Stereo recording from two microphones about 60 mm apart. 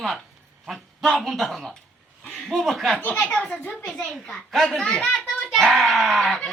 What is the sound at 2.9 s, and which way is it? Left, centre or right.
A child's voice, centre.